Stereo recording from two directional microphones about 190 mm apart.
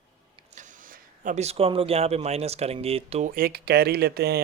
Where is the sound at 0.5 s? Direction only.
40° right (ahead or behind).